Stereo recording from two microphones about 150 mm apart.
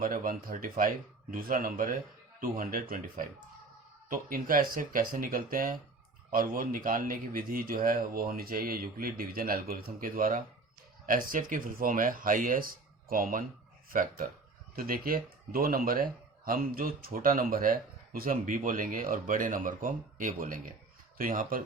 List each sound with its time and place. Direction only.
0.0 s a man's voice: 70° right (ahead or behind)